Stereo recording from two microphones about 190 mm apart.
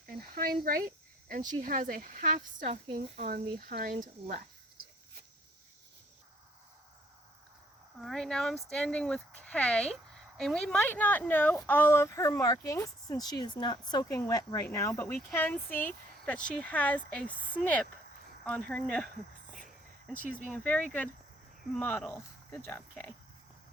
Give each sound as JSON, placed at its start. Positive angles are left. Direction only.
{"t": 0.0, "sound": "cricket", "side_deg": -50}
{"t": 1.3, "sound": "speech", "side_deg": -45}
{"t": 7.9, "sound": "a woman's voice", "side_deg": 0}
{"t": 19.5, "sound": "a sound", "side_deg": 0}
{"t": 20.5, "sound": "a woman's voice", "side_deg": 10}